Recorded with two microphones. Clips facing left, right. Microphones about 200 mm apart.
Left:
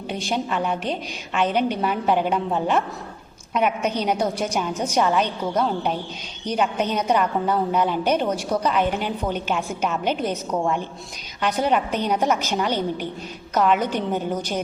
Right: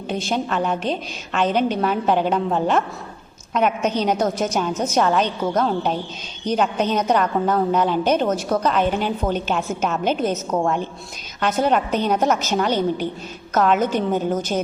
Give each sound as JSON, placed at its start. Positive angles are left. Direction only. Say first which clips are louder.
{"t": 0.1, "sound": "a woman's voice", "louder": "right 2 dB", "side_deg": 15}
{"t": 13.6, "sound": "a woman's voice", "louder": "right 2 dB", "side_deg": -45}
{"t": 13.8, "sound": "a woman's voice", "louder": "right 4 dB", "side_deg": 15}